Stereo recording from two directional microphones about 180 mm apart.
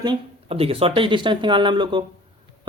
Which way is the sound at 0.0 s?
30° right (ahead or behind).